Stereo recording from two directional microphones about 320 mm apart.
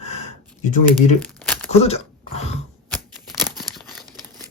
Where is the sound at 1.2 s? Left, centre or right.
Centre.